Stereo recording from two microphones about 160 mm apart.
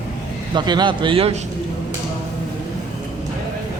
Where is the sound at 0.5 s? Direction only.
25° right (ahead or behind).